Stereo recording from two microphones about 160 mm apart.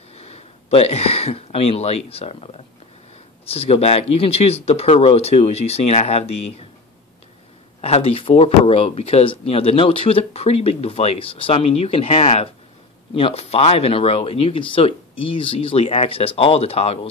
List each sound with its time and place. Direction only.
0.1 s speech: 40° left (ahead or behind)
7.8 s speech: 35° left (ahead or behind)